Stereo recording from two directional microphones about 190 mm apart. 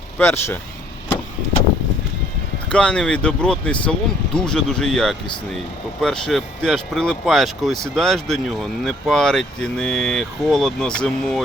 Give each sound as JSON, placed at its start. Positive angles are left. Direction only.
{"t": 0.2, "sound": "speech", "side_deg": 10}
{"t": 2.6, "sound": "speech", "side_deg": 5}